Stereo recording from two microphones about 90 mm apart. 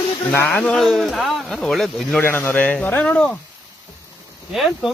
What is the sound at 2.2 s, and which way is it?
Speech, 25° left (ahead or behind).